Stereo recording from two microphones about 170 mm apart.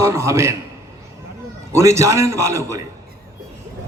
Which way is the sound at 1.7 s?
15° right (ahead or behind).